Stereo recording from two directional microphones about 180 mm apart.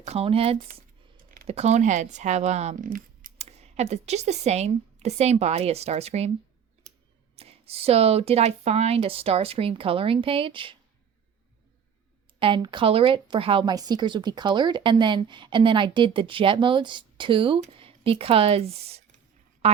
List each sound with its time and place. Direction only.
0.0 s speech: 35° right (ahead or behind)
0.7 s a sound: 50° right (ahead or behind)
1.5 s speech: 35° right (ahead or behind)
7.3 s speech: 35° right (ahead or behind)
12.4 s a woman's voice: 25° right (ahead or behind)